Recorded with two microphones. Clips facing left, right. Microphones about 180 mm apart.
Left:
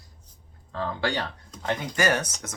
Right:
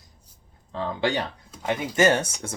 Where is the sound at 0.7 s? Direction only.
20° right (ahead or behind).